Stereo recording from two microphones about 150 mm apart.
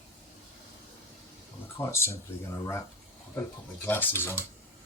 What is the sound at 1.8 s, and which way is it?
Speech, 15° left (ahead or behind).